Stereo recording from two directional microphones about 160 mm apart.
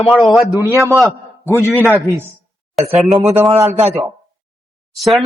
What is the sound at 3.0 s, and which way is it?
Speech, centre (ahead or behind).